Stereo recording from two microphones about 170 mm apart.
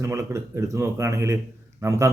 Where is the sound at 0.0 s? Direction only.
15° right (ahead or behind).